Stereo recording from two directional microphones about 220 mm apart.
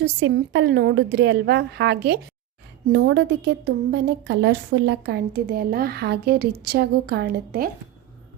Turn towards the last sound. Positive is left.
turn(degrees=-40)  # may be behind; listen again after turning